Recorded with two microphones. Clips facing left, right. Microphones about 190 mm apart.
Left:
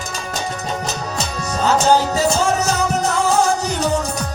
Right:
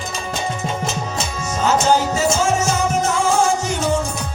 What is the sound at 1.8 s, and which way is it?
Music, 35° left (ahead or behind).